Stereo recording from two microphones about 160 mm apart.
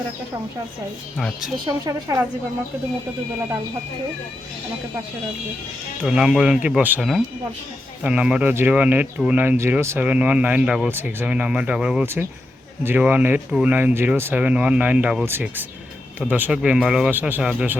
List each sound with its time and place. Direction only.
1.1 s speech: centre (ahead or behind)
1.8 s a woman's voice: 20° right (ahead or behind)
6.0 s speech: 5° right (ahead or behind)